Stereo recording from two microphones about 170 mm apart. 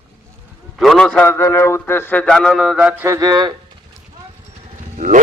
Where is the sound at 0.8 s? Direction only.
Centre (ahead or behind).